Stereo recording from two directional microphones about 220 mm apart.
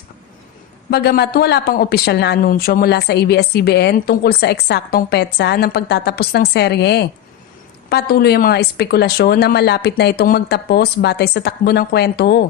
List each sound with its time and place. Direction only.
0.9 s speech: 45° left (ahead or behind)